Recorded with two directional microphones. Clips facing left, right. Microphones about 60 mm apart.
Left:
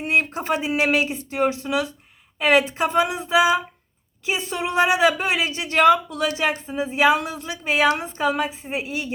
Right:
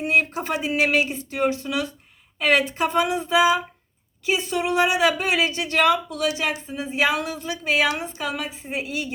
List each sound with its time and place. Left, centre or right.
0.3 s a woman's voice: left